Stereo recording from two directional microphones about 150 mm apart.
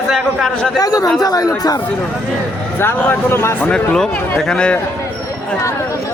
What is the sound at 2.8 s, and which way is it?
Speech, 15° left (ahead or behind).